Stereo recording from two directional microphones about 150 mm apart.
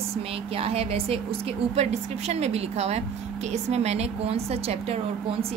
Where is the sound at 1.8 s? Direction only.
45° right (ahead or behind).